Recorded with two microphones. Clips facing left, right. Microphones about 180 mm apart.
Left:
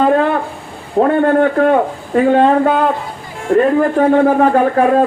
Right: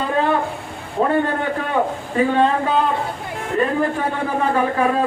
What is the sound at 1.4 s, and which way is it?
A man's voice, 55° left (ahead or behind).